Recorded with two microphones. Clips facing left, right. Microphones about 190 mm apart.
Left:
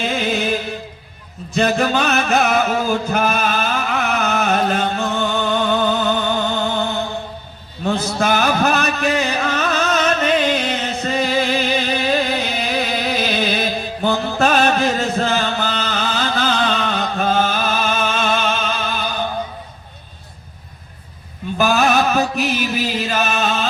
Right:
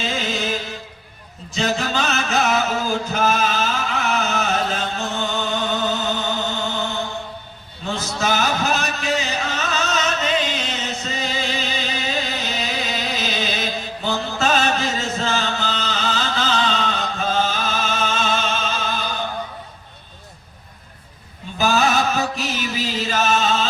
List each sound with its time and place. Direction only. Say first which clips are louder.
0.0 s music: left 4 dB; 55° left (ahead or behind)
1.5 s music: left 5 dB; 60° left (ahead or behind)
7.9 s a sound: left 5 dB; 55° left (ahead or behind)
21.6 s music: left 3 dB; 55° left (ahead or behind)